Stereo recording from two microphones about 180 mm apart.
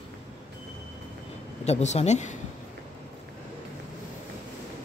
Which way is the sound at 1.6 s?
40° left (ahead or behind).